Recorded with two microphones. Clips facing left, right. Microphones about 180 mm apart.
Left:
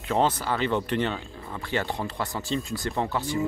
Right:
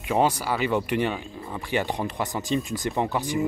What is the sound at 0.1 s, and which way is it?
Speech, 10° right (ahead or behind).